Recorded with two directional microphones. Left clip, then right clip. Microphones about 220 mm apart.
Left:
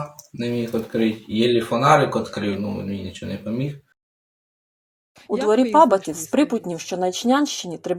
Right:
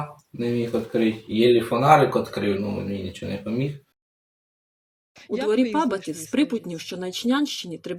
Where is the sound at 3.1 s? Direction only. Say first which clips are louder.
Even; centre (ahead or behind).